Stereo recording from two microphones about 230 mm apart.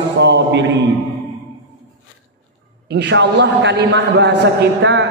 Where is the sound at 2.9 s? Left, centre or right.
Right.